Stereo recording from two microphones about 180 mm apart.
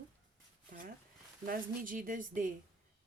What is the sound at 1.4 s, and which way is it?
Speech, 50° right (ahead or behind).